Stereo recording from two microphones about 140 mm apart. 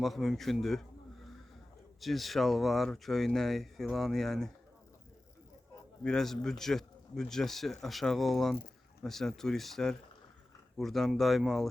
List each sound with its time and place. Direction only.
0.0 s a man's voice: centre (ahead or behind)
6.0 s speech: 5° left (ahead or behind)